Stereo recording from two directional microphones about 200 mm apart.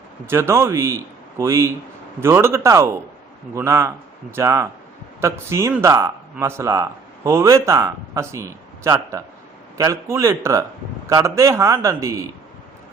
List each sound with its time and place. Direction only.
0.3 s speech: 10° right (ahead or behind)